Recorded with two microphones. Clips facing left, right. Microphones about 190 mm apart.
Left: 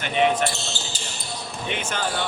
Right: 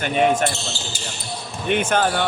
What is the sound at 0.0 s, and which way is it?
Speech, 45° right (ahead or behind).